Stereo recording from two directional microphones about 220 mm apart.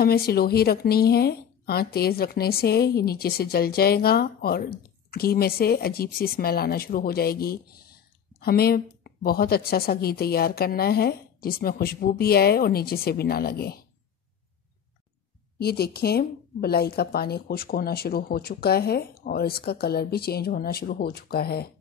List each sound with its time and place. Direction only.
0.0 s speech: 45° left (ahead or behind)
15.6 s speech: 45° left (ahead or behind)